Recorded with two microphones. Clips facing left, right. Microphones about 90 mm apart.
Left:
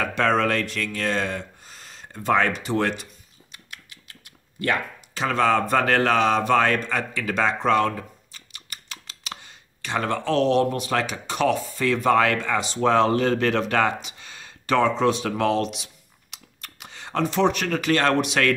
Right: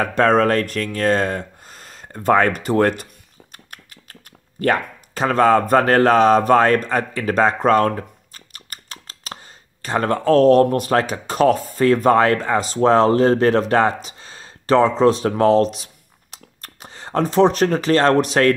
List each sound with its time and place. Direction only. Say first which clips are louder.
0.0 s speech: right 6 dB; 40° right (ahead or behind)